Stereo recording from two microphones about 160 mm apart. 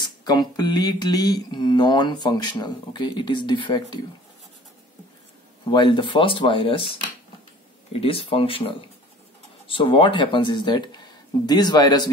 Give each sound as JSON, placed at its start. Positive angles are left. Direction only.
{"t": 0.2, "sound": "speech", "side_deg": 25}
{"t": 5.7, "sound": "speech", "side_deg": 30}